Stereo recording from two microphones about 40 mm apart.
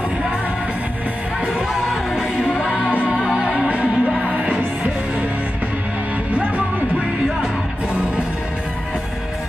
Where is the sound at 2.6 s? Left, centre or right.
Right.